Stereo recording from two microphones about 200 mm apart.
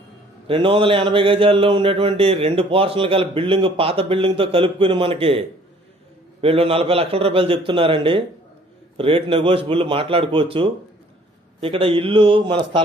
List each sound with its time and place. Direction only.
0.4 s speech: 25° right (ahead or behind)